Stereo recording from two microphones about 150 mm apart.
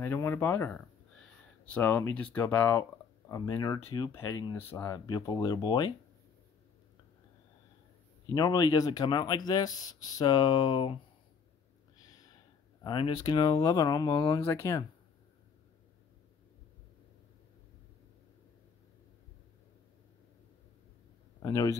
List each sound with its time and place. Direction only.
0.0 s speech: 15° left (ahead or behind)
2.8 s speech: 20° left (ahead or behind)
8.3 s speech: 25° left (ahead or behind)
12.8 s speech: 30° left (ahead or behind)
14.4 s speech: 15° left (ahead or behind)
21.4 s a man's voice: 20° left (ahead or behind)